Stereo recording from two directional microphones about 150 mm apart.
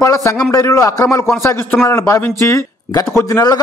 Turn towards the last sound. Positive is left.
turn(degrees=25)  # may be behind; listen again after turning